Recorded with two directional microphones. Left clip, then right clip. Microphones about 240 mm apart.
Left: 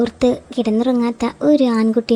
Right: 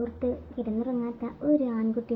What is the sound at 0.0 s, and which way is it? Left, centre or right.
A woman's voice, left.